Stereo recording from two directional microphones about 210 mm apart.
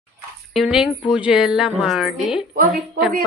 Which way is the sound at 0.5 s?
5° right (ahead or behind).